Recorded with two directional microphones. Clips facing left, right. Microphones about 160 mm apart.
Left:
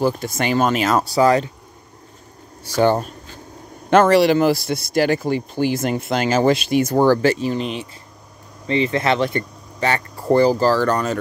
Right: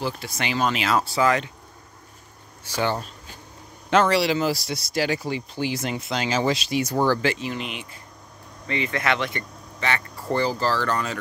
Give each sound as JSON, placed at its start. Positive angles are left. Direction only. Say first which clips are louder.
{"t": 0.0, "sound": "speech", "louder": "left 9 dB", "side_deg": 45}
{"t": 2.6, "sound": "speech", "louder": "left 9 dB", "side_deg": 45}